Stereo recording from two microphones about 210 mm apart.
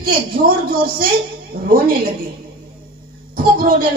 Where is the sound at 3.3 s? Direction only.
45° right (ahead or behind).